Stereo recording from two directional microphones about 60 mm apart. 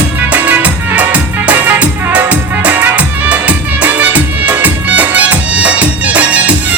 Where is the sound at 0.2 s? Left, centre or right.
Right.